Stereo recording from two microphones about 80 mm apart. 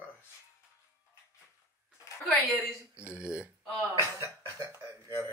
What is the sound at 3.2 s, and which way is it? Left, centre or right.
Speech, centre.